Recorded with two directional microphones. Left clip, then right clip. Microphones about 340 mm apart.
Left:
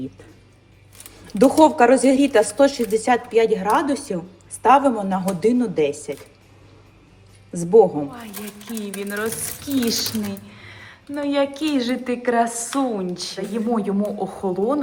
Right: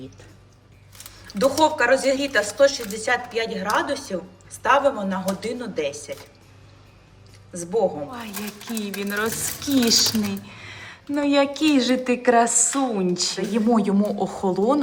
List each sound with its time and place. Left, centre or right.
1.4 s a woman's voice: centre
7.5 s a woman's voice: centre
8.1 s speech: centre